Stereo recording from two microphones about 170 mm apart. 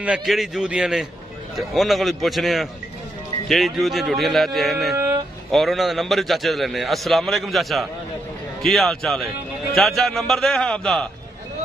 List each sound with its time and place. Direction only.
0.0 s a man's voice: 5° right (ahead or behind)
4.9 s a sound: 15° right (ahead or behind)
5.5 s a man's voice: centre (ahead or behind)